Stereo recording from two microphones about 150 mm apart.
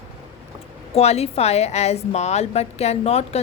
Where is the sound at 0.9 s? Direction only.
45° left (ahead or behind).